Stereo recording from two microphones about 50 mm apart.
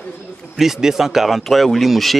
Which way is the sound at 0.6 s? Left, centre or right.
Centre.